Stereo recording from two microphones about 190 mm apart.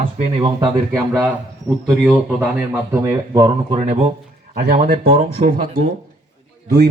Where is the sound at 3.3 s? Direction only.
20° right (ahead or behind).